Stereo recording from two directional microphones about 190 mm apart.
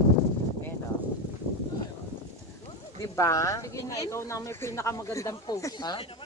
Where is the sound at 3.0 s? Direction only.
15° left (ahead or behind).